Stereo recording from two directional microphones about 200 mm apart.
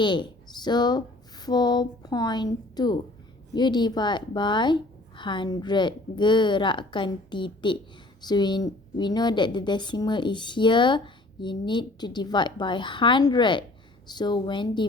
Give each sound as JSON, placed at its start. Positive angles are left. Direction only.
{"t": 0.0, "sound": "a woman's voice", "side_deg": 25}